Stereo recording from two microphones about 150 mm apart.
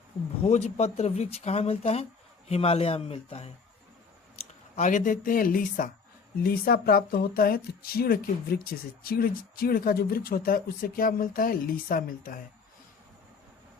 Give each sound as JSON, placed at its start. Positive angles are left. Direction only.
{"t": 0.4, "sound": "speech", "side_deg": 50}
{"t": 4.4, "sound": "speech", "side_deg": 55}
{"t": 6.4, "sound": "speech", "side_deg": 85}